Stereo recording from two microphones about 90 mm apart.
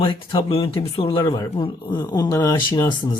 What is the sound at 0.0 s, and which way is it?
Speech, 70° left (ahead or behind).